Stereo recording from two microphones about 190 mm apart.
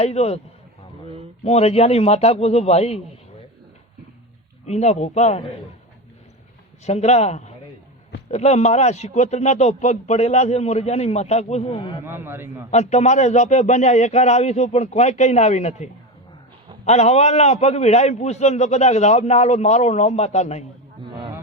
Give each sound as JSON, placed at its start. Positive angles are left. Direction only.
{"t": 0.0, "sound": "a man's voice", "side_deg": 35}
{"t": 1.5, "sound": "a man's voice", "side_deg": 35}
{"t": 4.6, "sound": "a man's voice", "side_deg": 35}
{"t": 6.8, "sound": "a man's voice", "side_deg": 35}
{"t": 12.0, "sound": "a man's voice", "side_deg": -10}
{"t": 12.7, "sound": "a man's voice", "side_deg": 35}